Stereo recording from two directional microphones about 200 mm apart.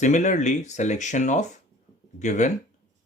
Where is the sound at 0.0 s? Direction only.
35° left (ahead or behind).